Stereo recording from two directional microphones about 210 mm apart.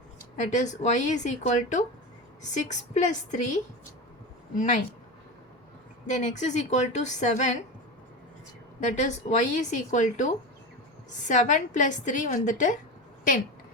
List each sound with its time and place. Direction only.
0.5 s a woman's voice: 35° left (ahead or behind)
6.1 s a woman's voice: 35° left (ahead or behind)
8.8 s a woman's voice: 35° left (ahead or behind)